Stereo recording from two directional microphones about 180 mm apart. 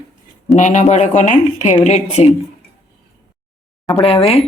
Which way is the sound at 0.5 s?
40° left (ahead or behind).